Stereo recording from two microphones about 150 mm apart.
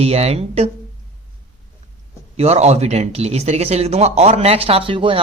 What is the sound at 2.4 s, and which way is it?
Speech, 45° right (ahead or behind).